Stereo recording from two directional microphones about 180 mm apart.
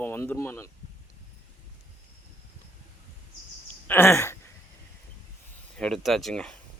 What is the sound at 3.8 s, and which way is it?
Speech, 10° left (ahead or behind).